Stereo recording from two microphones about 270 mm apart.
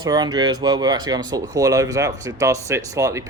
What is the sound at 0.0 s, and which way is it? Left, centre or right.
Speech, centre.